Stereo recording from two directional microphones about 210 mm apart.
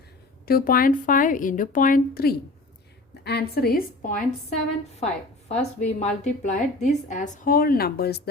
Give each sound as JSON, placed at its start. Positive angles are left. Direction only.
{"t": 0.4, "sound": "a woman's voice", "side_deg": 45}